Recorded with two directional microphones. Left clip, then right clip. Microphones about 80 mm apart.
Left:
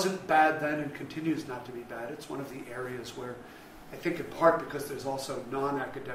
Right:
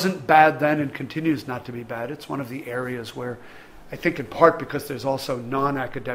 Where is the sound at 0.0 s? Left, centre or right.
Right.